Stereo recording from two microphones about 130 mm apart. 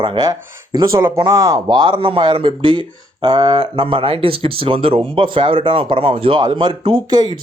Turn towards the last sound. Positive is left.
turn(degrees=-35)  # may be behind; listen again after turning